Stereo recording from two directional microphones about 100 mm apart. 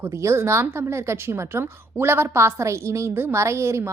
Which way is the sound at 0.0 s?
30° right (ahead or behind).